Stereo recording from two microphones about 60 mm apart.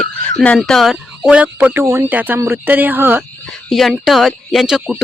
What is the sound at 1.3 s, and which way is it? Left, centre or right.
A woman's voice, right.